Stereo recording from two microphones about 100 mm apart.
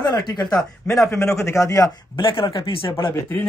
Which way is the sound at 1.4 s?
30° left (ahead or behind).